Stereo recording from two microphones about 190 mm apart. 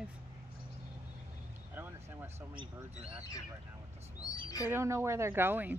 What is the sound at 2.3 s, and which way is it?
Speech, 25° right (ahead or behind).